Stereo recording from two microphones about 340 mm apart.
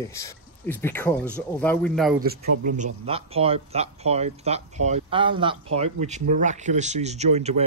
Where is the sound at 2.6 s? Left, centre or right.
Right.